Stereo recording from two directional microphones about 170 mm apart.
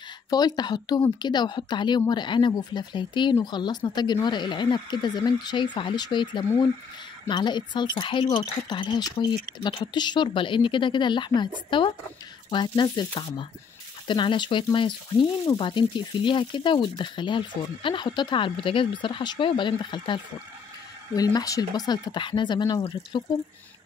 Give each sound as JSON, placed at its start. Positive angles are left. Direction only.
{"t": 0.3, "sound": "speech", "side_deg": 25}